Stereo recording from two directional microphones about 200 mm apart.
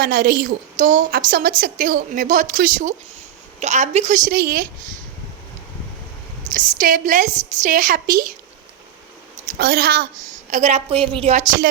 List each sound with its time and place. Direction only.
0.0 s a woman's voice: 50° right (ahead or behind)
4.3 s a woman's voice: 50° right (ahead or behind)
6.5 s a woman's voice: 45° right (ahead or behind)
9.6 s a woman's voice: 50° right (ahead or behind)
10.5 s a woman's voice: 35° right (ahead or behind)